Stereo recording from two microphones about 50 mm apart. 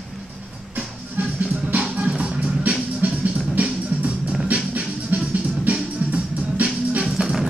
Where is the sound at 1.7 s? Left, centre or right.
Right.